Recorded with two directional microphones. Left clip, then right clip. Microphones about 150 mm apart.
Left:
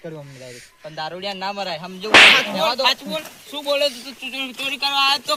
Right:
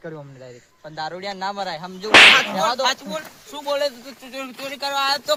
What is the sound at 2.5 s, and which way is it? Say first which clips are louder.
Speech: left 1 dB; 20° right (ahead or behind).